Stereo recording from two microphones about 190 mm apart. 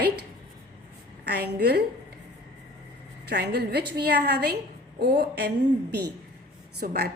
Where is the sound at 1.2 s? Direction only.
60° right (ahead or behind).